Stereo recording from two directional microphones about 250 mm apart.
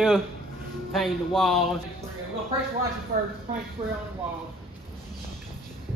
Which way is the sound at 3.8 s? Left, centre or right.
Right.